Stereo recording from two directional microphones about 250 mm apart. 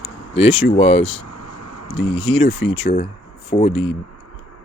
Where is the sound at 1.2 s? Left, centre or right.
Left.